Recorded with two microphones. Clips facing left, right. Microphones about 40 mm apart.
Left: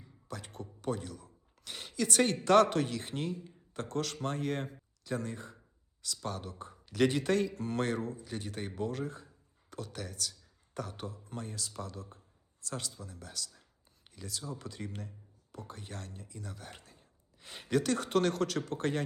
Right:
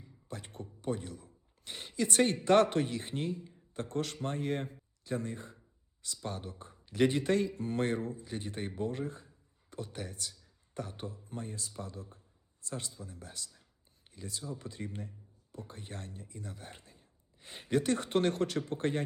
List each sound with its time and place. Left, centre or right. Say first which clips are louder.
0.3 s a man's voice: left 1 dB; right
3.8 s speech: even; left
4.2 s a man's voice: even; right
4.6 s a sound: even; left
5.1 s a man's voice: even; right
7.5 s speech: even; left
7.8 s a man's voice: right 1 dB; right
11.1 s speech: even; left
13.0 s a man's voice: left 2 dB; right
14.8 s a man's voice: right 1 dB; centre
15.7 s a man's voice: left 1 dB; right